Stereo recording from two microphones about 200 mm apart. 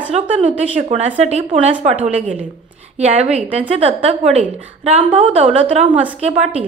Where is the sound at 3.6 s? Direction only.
30° right (ahead or behind).